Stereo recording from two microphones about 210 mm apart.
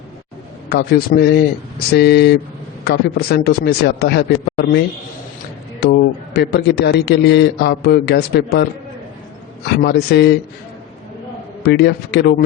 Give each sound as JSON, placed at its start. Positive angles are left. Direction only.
{"t": 0.7, "sound": "a man's voice", "side_deg": 50}
{"t": 5.8, "sound": "a man's voice", "side_deg": 50}
{"t": 9.7, "sound": "a man's voice", "side_deg": 50}
{"t": 11.6, "sound": "a man's voice", "side_deg": 50}